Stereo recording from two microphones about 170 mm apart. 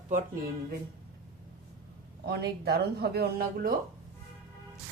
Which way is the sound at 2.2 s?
65° right (ahead or behind).